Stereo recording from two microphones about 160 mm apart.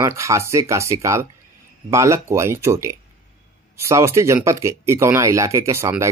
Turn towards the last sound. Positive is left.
turn(degrees=-20)  # may be behind; listen again after turning